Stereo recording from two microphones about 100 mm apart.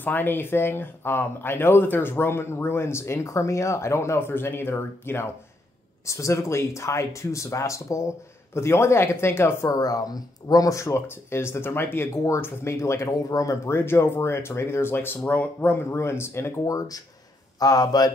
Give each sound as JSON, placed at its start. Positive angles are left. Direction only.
{"t": 0.0, "sound": "speech", "side_deg": 20}